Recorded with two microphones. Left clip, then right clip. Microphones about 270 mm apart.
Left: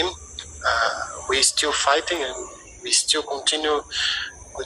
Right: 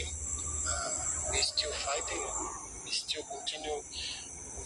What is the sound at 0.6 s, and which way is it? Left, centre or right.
Speech, left.